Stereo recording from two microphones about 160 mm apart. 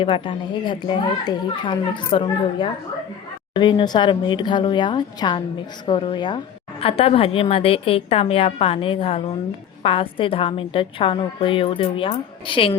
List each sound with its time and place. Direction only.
0.0 s a woman's voice: 30° left (ahead or behind)